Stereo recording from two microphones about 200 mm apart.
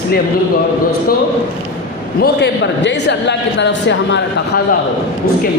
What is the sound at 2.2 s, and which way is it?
A man's voice, 60° left (ahead or behind).